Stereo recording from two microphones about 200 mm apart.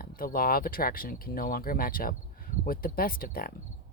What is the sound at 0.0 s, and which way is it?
Speech, 45° left (ahead or behind).